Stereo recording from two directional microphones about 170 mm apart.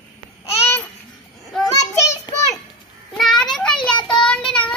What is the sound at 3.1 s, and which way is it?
Child singing, 5° left (ahead or behind).